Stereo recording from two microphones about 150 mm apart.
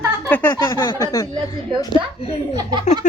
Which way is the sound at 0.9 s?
25° left (ahead or behind).